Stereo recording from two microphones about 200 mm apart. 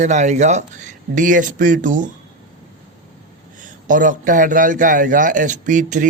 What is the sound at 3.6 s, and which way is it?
A man's voice, 40° right (ahead or behind).